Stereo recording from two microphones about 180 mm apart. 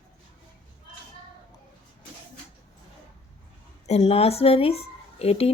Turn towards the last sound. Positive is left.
turn(degrees=35)  # may be behind; listen again after turning